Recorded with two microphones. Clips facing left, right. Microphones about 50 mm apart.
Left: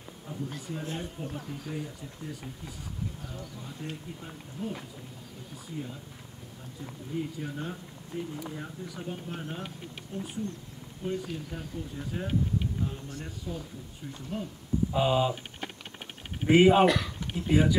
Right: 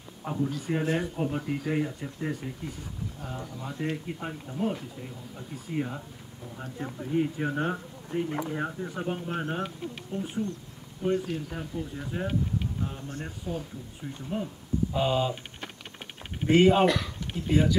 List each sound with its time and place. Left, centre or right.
0.3 s speech: right
0.6 s speech: right
3.8 s speech: right; by 12.4 s centre
13.1 s speech: right
14.3 s speech: right
14.9 s speech: centre
16.4 s speech: centre